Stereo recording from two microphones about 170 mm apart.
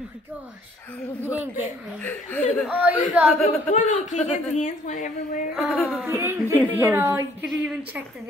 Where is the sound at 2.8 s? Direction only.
10° right (ahead or behind).